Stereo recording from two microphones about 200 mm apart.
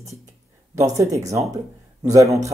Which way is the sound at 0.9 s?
15° right (ahead or behind).